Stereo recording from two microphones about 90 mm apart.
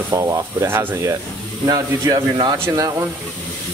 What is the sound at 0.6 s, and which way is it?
Speech, 30° right (ahead or behind).